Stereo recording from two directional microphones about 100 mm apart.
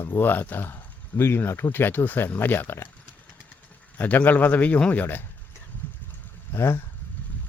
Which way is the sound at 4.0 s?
15° left (ahead or behind).